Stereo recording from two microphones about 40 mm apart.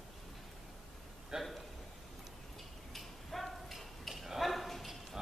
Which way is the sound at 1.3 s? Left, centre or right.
Centre.